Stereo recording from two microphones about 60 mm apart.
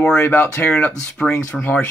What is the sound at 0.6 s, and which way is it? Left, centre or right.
Speech, centre.